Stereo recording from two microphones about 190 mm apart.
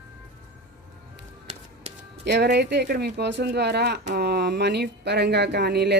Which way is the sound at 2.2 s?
60° right (ahead or behind).